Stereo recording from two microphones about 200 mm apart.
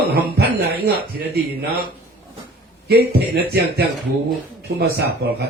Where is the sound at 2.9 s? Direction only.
55° right (ahead or behind).